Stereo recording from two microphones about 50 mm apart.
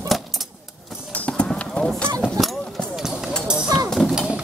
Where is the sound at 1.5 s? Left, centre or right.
Centre.